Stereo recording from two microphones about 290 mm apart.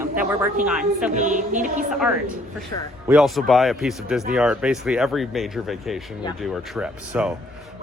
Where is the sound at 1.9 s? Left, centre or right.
Centre.